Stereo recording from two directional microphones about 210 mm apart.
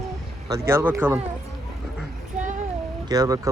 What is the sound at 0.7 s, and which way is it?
Speech, 10° right (ahead or behind).